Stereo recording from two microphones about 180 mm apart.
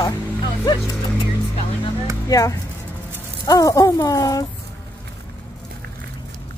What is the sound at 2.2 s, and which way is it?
Speech, 20° left (ahead or behind).